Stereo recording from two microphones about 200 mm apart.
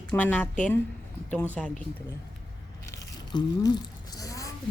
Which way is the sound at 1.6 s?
Centre (ahead or behind).